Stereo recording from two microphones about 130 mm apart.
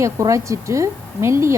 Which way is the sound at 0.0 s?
25° right (ahead or behind).